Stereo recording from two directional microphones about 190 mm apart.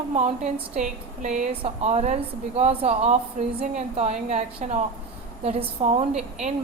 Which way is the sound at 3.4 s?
40° right (ahead or behind).